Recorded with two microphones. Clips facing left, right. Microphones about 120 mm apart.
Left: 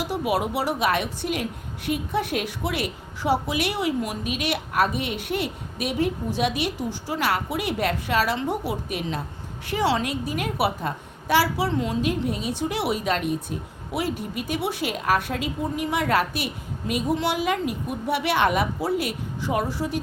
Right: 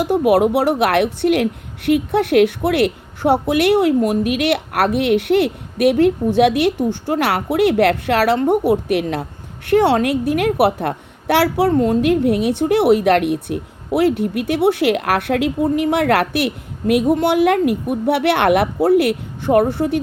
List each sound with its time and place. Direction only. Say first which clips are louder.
0.0 s a woman's voice: right 11 dB; 60° right (ahead or behind)